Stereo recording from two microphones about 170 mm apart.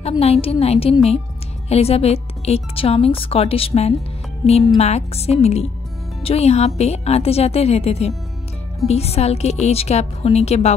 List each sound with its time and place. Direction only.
0.2 s speech: 35° left (ahead or behind)